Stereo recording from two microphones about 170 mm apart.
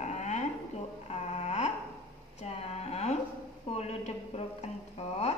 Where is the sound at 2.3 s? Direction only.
40° left (ahead or behind).